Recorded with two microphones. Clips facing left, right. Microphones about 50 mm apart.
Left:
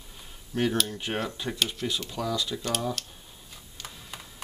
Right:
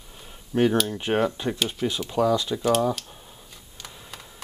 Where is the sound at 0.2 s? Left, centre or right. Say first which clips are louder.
Right 6 dB; centre.